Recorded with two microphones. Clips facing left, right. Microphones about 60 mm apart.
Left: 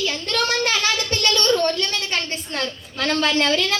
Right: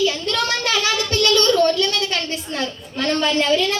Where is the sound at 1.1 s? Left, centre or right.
Left.